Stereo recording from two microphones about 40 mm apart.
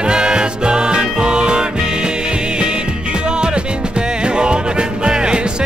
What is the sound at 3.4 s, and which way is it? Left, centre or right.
Music, right.